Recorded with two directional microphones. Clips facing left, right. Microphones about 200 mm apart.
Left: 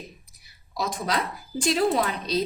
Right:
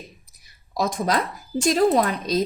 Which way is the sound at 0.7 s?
45° right (ahead or behind).